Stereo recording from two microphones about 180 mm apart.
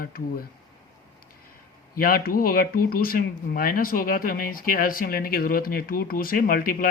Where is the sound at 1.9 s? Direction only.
55° left (ahead or behind).